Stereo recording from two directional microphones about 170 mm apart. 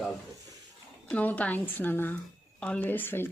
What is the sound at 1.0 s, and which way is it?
Speech, 10° left (ahead or behind).